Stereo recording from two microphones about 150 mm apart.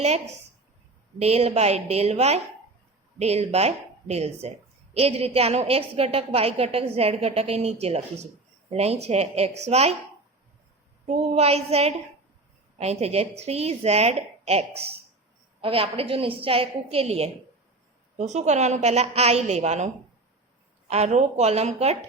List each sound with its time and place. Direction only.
1.2 s a woman's voice: 45° right (ahead or behind)
11.1 s a woman's voice: 45° right (ahead or behind)